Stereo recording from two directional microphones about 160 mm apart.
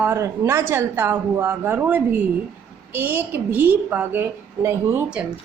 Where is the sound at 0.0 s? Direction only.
15° right (ahead or behind).